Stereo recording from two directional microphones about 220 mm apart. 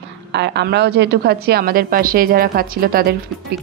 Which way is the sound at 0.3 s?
50° right (ahead or behind).